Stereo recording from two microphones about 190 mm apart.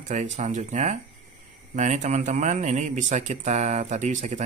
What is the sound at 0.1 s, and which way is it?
Speech, 40° right (ahead or behind).